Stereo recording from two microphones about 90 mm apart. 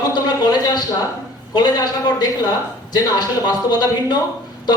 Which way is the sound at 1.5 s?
50° left (ahead or behind).